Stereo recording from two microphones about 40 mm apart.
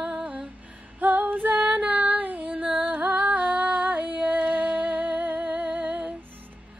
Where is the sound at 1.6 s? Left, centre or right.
Right.